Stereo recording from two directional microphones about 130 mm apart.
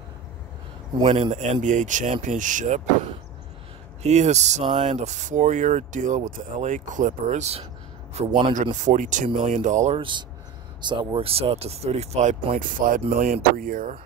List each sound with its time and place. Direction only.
1.0 s speech: 45° right (ahead or behind)
1.3 s speech: 65° right (ahead or behind)
4.0 s speech: 60° right (ahead or behind)
8.3 s speech: 40° right (ahead or behind)
8.7 s speech: 75° right (ahead or behind)
9.9 s speech: 40° right (ahead or behind); by 12.4 s 60° right (ahead or behind)
12.5 s speech: 90° right